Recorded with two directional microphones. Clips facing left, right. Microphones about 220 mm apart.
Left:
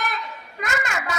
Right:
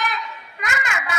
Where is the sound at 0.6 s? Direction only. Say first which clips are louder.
Left 1 dB; 40° left (ahead or behind).